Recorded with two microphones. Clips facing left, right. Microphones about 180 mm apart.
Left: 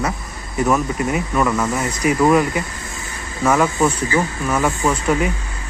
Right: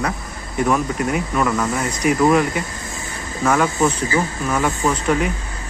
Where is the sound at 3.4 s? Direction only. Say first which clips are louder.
Left 1 dB; 5° left (ahead or behind).